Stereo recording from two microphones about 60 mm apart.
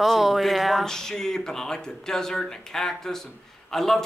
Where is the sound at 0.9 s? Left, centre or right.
Centre.